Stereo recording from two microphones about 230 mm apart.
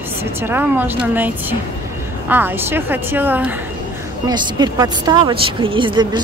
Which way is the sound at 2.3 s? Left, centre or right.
Centre.